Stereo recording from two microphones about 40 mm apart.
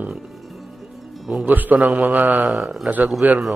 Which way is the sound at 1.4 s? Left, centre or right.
Right.